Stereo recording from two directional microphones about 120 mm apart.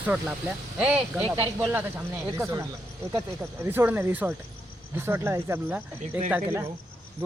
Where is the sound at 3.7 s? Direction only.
15° right (ahead or behind).